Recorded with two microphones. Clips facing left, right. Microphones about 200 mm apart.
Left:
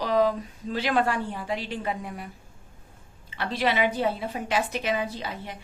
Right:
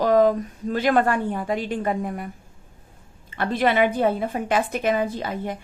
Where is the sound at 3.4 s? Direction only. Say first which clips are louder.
Right 5 dB; 50° right (ahead or behind).